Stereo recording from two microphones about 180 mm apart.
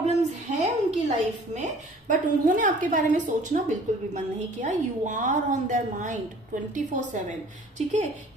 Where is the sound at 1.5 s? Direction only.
40° right (ahead or behind).